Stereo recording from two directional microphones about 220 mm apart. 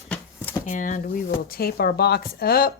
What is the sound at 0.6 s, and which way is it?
Speech, 35° left (ahead or behind).